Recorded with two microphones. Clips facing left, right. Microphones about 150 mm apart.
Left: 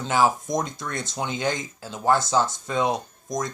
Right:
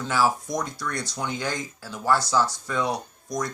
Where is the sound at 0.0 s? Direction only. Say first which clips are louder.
Left 2 dB; 20° left (ahead or behind).